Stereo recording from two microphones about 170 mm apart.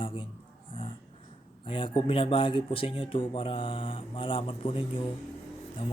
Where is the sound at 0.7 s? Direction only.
30° left (ahead or behind).